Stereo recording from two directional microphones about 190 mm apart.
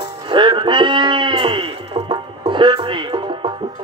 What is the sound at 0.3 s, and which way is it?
Speech, 25° right (ahead or behind).